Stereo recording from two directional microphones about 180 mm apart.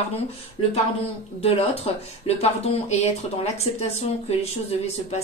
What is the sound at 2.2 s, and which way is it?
A woman's voice, 35° left (ahead or behind).